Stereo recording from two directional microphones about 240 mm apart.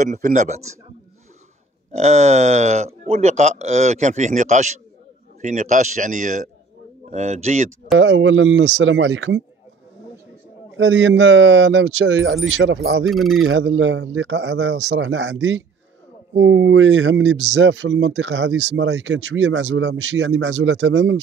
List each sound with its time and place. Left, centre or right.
0.0 s a man's voice: right
1.9 s a man's voice: right
8.0 s speech: right
10.8 s speech: right
13.0 s speech: centre
13.4 s speech: right